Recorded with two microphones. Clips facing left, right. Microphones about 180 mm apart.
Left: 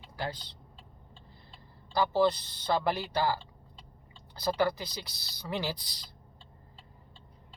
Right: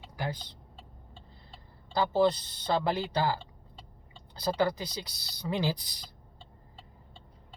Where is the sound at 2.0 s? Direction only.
15° right (ahead or behind).